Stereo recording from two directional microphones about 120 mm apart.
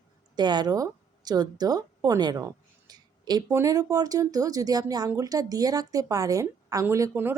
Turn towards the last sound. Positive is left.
turn(degrees=-20)  # may be behind; listen again after turning